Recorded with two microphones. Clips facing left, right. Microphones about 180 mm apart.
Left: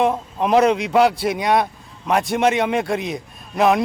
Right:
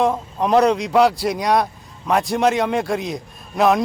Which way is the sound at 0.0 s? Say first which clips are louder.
Even; centre (ahead or behind).